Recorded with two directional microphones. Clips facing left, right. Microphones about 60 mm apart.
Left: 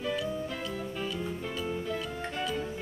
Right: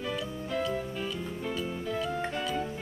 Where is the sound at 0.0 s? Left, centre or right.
Centre.